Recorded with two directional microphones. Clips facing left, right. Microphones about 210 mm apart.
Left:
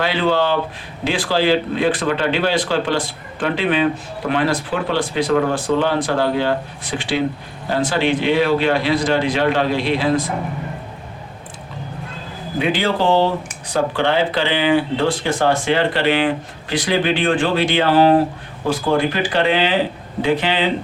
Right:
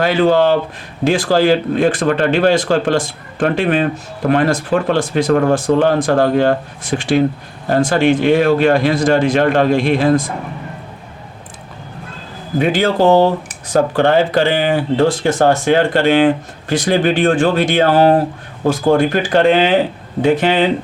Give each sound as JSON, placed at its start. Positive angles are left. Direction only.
{"t": 0.0, "sound": "speech", "side_deg": -45}
{"t": 12.5, "sound": "speech", "side_deg": -45}